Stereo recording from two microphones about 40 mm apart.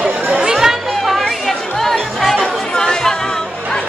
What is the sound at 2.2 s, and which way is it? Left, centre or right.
Chatter, centre.